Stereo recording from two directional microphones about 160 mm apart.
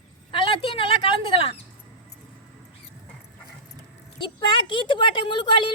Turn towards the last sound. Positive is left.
turn(degrees=30)  # may be behind; listen again after turning